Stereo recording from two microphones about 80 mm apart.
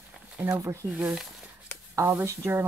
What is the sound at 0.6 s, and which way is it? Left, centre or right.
Speech, right.